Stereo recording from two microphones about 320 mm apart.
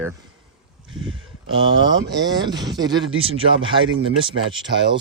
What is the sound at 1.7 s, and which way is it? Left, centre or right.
Speech, right.